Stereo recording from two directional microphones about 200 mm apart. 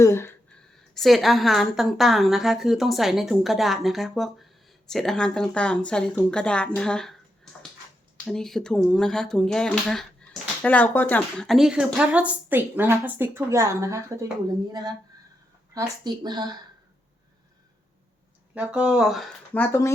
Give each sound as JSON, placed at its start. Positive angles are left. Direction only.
{"t": 0.0, "sound": "speech", "side_deg": 10}
{"t": 0.9, "sound": "a woman's voice", "side_deg": 0}
{"t": 8.2, "sound": "a woman's voice", "side_deg": 0}
{"t": 16.0, "sound": "speech", "side_deg": -20}
{"t": 18.5, "sound": "a woman's voice", "side_deg": -5}